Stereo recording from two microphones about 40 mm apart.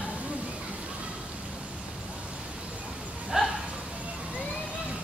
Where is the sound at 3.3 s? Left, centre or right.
Centre.